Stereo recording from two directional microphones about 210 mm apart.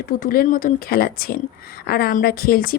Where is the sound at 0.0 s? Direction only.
45° left (ahead or behind).